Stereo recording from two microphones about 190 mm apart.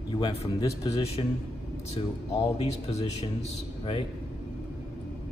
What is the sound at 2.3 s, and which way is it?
A man's voice, 30° left (ahead or behind).